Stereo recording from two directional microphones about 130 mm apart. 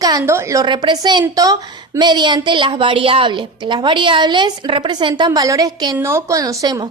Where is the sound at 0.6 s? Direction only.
35° right (ahead or behind).